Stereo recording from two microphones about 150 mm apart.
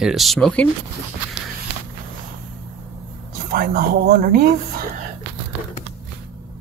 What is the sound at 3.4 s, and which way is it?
Speech, 70° right (ahead or behind).